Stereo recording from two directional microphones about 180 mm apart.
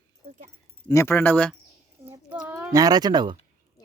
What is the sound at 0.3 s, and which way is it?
Speech, 50° right (ahead or behind).